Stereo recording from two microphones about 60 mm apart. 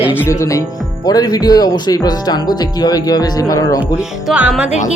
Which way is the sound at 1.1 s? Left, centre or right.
Left.